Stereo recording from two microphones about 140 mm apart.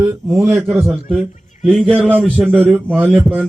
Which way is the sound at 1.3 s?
60° left (ahead or behind).